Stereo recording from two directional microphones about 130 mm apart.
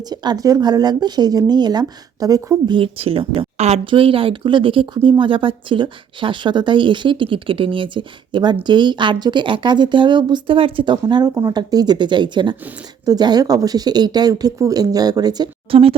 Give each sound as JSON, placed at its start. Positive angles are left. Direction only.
{"t": 0.1, "sound": "speech", "side_deg": -30}
{"t": 15.7, "sound": "speech", "side_deg": -45}